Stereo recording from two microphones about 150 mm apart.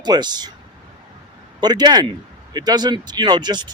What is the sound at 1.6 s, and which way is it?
A man's voice, 25° right (ahead or behind).